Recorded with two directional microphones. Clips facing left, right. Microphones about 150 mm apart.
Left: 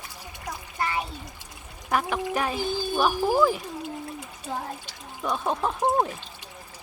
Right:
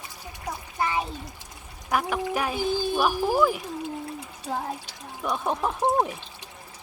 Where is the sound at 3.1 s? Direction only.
15° left (ahead or behind).